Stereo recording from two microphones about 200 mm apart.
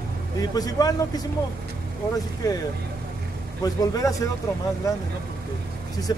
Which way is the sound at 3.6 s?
15° left (ahead or behind).